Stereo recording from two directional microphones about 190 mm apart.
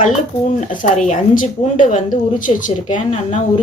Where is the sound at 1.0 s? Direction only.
45° left (ahead or behind).